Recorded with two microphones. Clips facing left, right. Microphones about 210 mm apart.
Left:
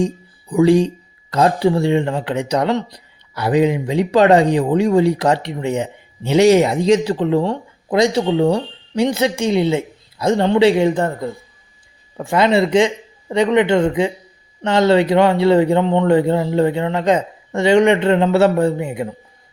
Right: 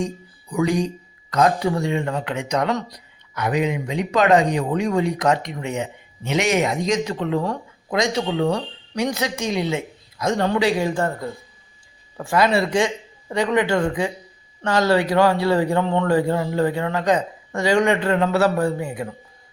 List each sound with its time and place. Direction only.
0.5 s speech: 30° left (ahead or behind)